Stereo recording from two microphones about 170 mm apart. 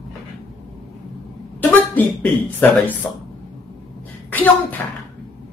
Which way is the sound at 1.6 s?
10° left (ahead or behind).